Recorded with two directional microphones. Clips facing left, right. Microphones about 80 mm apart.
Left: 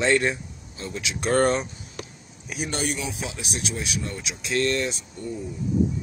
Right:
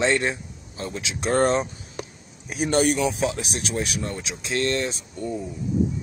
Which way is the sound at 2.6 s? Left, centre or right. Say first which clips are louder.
Right 8 dB; right.